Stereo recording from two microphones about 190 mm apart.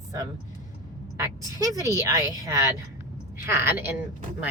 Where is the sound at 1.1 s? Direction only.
15° right (ahead or behind).